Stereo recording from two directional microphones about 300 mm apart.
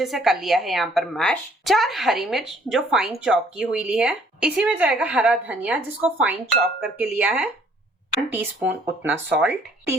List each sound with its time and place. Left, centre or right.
0.0 s a woman's voice: centre